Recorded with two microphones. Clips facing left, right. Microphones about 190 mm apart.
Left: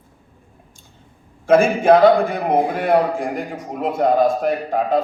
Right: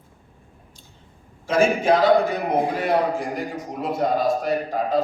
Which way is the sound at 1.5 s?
55° left (ahead or behind).